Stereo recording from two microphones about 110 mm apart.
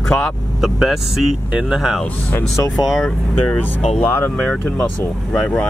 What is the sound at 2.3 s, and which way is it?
Speech, 15° left (ahead or behind).